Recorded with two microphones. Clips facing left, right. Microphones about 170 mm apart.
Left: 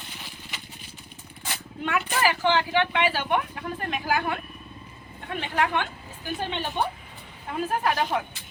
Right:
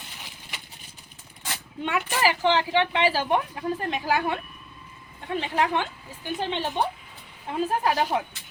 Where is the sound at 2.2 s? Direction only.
25° right (ahead or behind).